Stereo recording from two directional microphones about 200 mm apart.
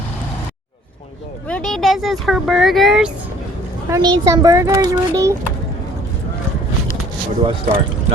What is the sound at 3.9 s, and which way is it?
A child's voice, 15° right (ahead or behind).